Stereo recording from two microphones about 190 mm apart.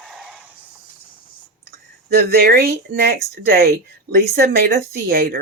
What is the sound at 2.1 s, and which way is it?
Speech, 55° right (ahead or behind).